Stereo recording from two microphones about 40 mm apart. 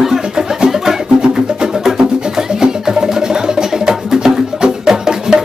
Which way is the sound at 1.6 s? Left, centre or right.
Centre.